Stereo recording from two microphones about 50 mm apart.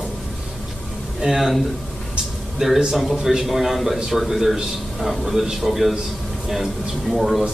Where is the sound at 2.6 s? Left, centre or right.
Centre.